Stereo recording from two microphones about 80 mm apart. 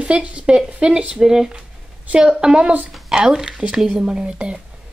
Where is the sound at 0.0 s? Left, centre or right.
Centre.